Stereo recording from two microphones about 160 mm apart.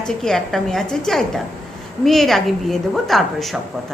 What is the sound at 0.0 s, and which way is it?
A woman's voice, 5° left (ahead or behind).